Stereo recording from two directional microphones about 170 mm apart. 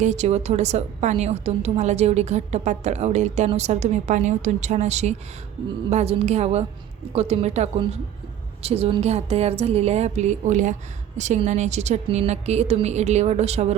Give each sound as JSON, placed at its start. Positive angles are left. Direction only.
{"t": 0.0, "sound": "a woman's voice", "side_deg": -40}